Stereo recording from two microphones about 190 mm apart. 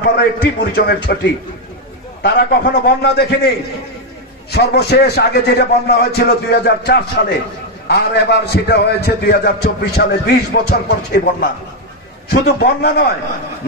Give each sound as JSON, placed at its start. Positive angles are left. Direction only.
{"t": 0.0, "sound": "a man's voice", "side_deg": 55}
{"t": 12.3, "sound": "a man's voice", "side_deg": 55}